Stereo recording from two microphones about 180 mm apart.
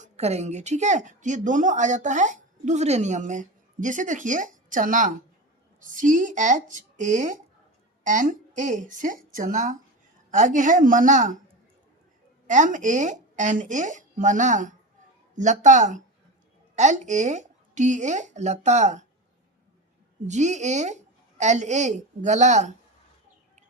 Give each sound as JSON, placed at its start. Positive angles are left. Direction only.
{"t": 0.0, "sound": "a woman's voice", "side_deg": -35}
{"t": 12.5, "sound": "a woman's voice", "side_deg": -45}
{"t": 20.2, "sound": "a woman's voice", "side_deg": -40}